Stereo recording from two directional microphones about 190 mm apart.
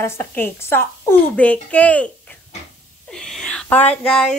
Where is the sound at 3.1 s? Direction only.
5° left (ahead or behind).